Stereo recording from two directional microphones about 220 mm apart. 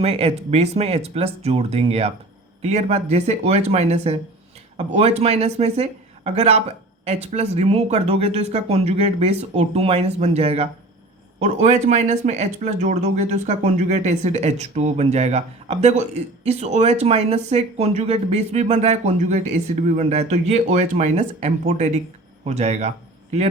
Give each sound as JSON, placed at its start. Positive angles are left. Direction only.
{"t": 0.0, "sound": "speech", "side_deg": -25}